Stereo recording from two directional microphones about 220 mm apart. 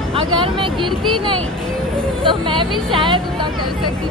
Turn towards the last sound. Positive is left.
turn(degrees=-25)  # may be behind; listen again after turning